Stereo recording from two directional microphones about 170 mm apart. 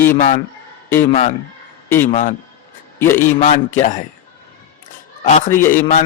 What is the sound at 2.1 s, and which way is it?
Speech, 45° left (ahead or behind).